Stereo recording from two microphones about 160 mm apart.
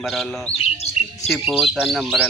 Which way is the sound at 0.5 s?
40° left (ahead or behind).